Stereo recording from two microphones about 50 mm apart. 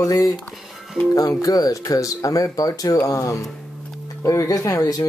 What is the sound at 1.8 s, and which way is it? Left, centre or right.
Speech, left.